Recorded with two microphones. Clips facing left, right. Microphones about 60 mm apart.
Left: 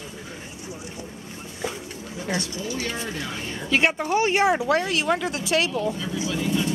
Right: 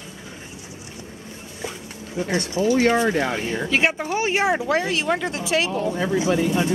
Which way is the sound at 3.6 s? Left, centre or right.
Centre.